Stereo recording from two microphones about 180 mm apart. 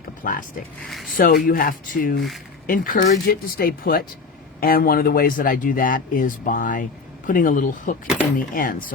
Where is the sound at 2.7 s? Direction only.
50° left (ahead or behind).